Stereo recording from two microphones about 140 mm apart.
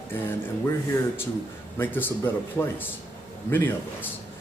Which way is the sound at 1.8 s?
15° left (ahead or behind).